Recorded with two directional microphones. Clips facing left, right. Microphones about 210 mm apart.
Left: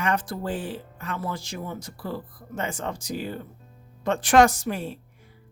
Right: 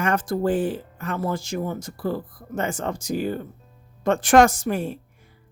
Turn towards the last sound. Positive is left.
turn(degrees=-50)  # may be behind; listen again after turning